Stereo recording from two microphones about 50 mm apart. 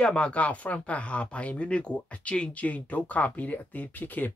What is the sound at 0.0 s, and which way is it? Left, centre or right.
Speech, left.